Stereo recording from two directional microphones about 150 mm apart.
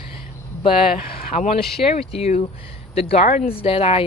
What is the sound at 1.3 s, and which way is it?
Speech, 50° left (ahead or behind).